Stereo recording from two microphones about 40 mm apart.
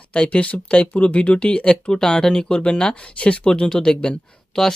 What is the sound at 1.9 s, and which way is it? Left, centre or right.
Speech, centre.